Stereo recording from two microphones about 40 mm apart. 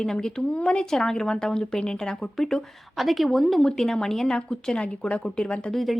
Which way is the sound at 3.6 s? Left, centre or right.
Centre.